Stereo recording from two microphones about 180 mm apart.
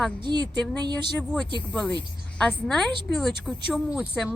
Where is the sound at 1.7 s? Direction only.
5° left (ahead or behind).